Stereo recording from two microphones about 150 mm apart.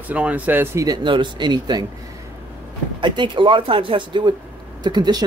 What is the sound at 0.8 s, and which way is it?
Speech, 30° right (ahead or behind).